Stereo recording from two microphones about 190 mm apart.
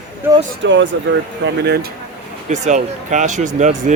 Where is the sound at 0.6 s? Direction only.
75° right (ahead or behind).